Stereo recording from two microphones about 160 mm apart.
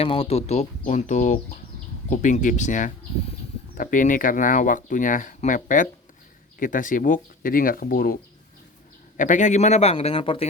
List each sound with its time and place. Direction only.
0.0 s speech: 35° left (ahead or behind); by 8.2 s 65° left (ahead or behind)
9.1 s speech: 55° left (ahead or behind); by 10.4 s 35° left (ahead or behind)